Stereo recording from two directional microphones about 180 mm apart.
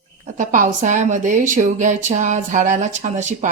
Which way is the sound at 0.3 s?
45° right (ahead or behind).